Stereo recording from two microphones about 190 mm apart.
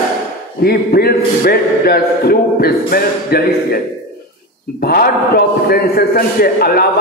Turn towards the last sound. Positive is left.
turn(degrees=50)  # may be behind; listen again after turning